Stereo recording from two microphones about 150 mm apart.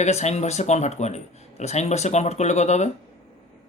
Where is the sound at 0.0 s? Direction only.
50° left (ahead or behind).